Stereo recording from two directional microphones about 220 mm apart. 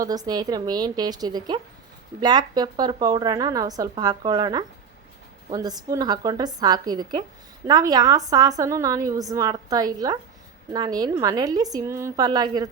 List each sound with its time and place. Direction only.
0.0 s a woman's voice: 15° right (ahead or behind)